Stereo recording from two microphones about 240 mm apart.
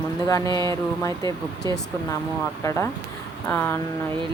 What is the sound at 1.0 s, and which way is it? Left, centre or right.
Speech, centre.